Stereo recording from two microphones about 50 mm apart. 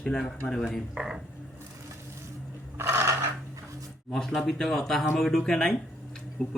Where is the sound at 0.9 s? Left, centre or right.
Centre.